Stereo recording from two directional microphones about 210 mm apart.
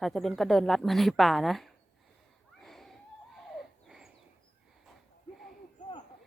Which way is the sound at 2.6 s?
Centre (ahead or behind).